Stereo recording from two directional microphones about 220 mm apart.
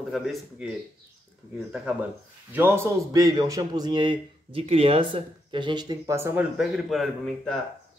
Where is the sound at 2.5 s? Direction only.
10° right (ahead or behind).